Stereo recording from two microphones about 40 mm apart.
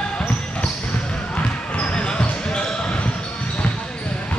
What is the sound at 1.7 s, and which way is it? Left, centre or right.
Basketball bounce, left.